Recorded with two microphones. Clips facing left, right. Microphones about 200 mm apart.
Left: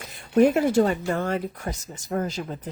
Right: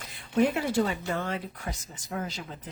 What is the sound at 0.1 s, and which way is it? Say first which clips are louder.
Speech: left 7 dB; 45° left (ahead or behind).